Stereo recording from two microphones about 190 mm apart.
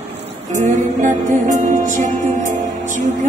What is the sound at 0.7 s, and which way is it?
Music, 40° right (ahead or behind).